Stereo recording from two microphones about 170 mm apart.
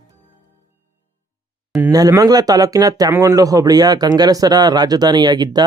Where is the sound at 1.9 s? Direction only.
20° right (ahead or behind).